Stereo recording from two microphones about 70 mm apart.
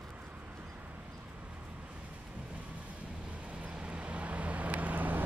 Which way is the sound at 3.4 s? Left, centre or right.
Centre.